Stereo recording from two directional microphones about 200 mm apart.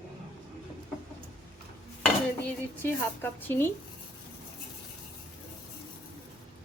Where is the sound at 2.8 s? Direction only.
10° left (ahead or behind).